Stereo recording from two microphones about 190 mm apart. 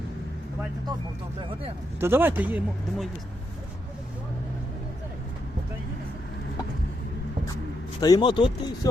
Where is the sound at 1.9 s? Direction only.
10° right (ahead or behind).